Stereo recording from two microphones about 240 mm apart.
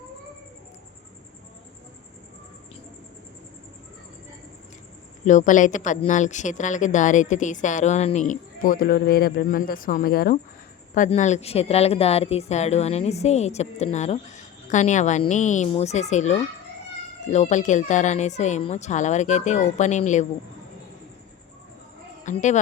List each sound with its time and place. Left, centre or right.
5.2 s a woman's voice: left
22.2 s a woman's voice: left